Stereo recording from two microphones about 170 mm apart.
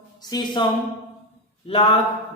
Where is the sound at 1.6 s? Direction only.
35° left (ahead or behind).